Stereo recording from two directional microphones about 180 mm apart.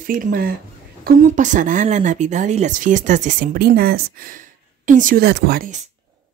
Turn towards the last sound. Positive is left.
turn(degrees=-50)  # may be behind; listen again after turning